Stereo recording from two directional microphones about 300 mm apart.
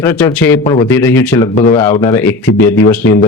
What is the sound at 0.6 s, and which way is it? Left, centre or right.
Speech, centre.